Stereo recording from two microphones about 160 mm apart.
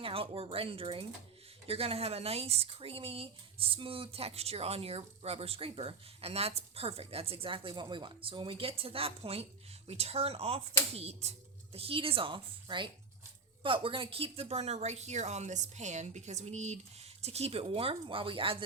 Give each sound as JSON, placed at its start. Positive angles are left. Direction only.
{"t": 0.0, "sound": "speech", "side_deg": -35}